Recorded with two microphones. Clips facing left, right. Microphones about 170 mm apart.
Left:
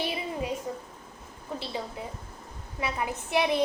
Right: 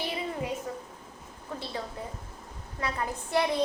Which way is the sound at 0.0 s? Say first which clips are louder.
Left 1 dB; 15° left (ahead or behind).